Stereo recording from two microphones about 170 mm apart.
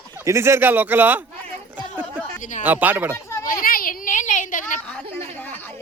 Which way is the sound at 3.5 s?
55° left (ahead or behind).